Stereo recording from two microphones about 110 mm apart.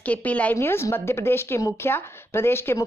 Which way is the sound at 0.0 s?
15° left (ahead or behind).